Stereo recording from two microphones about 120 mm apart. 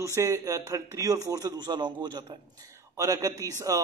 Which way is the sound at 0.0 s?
25° right (ahead or behind).